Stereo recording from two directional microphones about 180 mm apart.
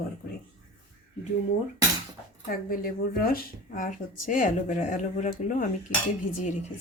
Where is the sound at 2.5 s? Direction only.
55° left (ahead or behind).